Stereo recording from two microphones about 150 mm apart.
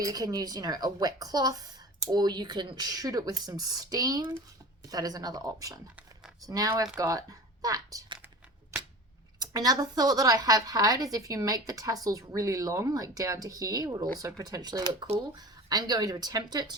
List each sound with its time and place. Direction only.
0.0 s a woman's voice: 25° right (ahead or behind)
9.4 s a woman's voice: 25° right (ahead or behind)